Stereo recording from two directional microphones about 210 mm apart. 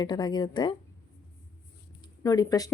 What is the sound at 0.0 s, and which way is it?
Speech, 20° left (ahead or behind).